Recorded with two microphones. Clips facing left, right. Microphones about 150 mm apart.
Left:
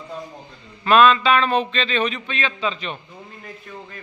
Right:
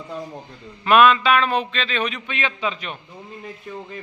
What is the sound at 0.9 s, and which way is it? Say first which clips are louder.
A man's voice: even; 10° right (ahead or behind).